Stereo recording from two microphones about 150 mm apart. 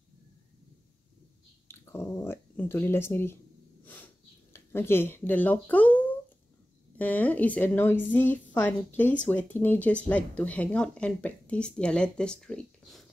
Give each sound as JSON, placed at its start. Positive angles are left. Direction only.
{"t": 1.7, "sound": "speech", "side_deg": 15}
{"t": 3.8, "sound": "a sound", "side_deg": 15}
{"t": 7.0, "sound": "speech", "side_deg": 10}